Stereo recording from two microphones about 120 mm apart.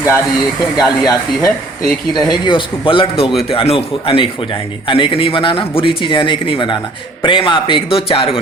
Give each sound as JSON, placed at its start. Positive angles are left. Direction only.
{"t": 0.8, "sound": "a man's voice", "side_deg": 30}